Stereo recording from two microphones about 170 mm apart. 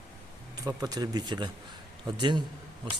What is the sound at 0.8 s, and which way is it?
Speech, 25° right (ahead or behind).